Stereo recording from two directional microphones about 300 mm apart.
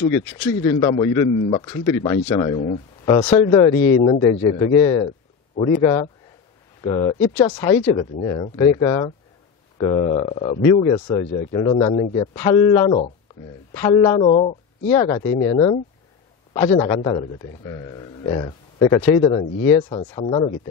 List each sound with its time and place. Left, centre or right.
0.2 s a man's voice: centre